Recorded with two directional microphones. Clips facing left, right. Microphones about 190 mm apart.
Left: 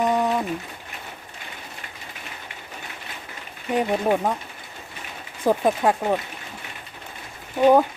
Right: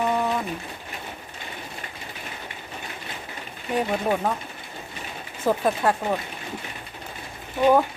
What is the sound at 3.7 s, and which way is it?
Speech, 20° left (ahead or behind).